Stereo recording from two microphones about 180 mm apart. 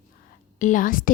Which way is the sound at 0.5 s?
45° left (ahead or behind).